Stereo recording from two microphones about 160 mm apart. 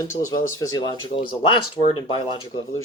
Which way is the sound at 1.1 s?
35° left (ahead or behind).